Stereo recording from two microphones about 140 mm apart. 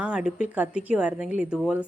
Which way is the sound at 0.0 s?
5° right (ahead or behind).